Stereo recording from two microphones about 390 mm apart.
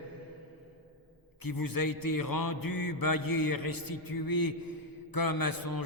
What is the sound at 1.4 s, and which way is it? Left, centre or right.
A man's voice, left.